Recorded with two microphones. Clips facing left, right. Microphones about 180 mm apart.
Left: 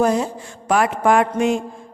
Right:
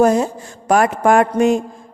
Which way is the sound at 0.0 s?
45° right (ahead or behind).